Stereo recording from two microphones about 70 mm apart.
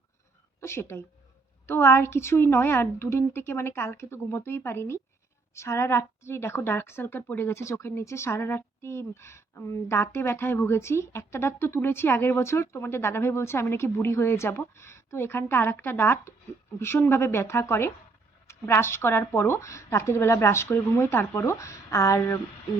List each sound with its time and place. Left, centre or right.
0.6 s a woman's voice: left
19.5 s a woman's voice: left
21.3 s speech: left